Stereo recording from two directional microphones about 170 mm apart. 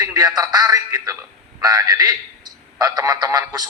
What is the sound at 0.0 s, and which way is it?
A man's voice, 20° right (ahead or behind).